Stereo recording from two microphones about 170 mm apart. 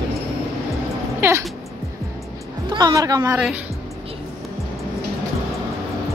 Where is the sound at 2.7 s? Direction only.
20° right (ahead or behind).